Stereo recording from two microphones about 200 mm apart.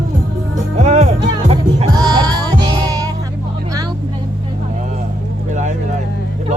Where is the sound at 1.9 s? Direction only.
20° right (ahead or behind).